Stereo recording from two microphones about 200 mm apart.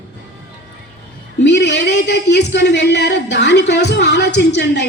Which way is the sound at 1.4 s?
60° left (ahead or behind).